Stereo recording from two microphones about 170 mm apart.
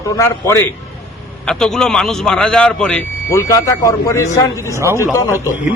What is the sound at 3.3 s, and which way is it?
A man's voice, 20° left (ahead or behind).